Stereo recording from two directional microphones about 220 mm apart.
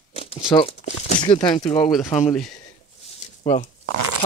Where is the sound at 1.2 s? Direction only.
20° left (ahead or behind).